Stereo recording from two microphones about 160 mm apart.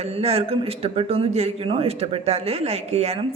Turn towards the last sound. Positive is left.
turn(degrees=-40)  # may be behind; listen again after turning